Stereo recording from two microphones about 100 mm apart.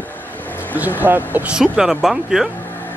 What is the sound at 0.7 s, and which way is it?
Speech, 20° right (ahead or behind).